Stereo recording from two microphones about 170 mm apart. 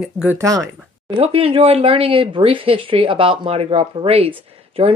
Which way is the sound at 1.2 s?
35° right (ahead or behind).